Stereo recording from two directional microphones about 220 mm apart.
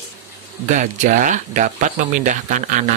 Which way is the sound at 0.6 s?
35° right (ahead or behind).